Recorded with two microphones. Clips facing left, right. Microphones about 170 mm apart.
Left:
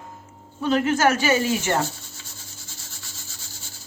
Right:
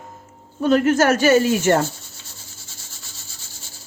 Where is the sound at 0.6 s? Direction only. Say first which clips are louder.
Right 4 dB; 45° right (ahead or behind).